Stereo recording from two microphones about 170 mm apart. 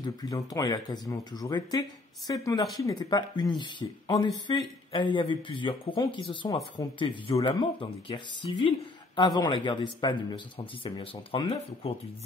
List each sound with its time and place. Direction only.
0.0 s speech: 25° left (ahead or behind)